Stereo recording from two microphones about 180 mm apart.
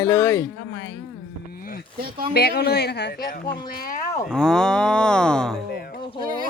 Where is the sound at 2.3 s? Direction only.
65° left (ahead or behind).